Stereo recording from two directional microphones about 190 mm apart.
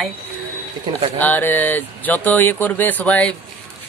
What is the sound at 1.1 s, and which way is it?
A man's voice, 10° left (ahead or behind).